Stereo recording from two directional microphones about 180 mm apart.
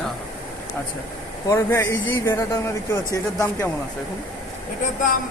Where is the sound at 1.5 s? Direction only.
15° left (ahead or behind).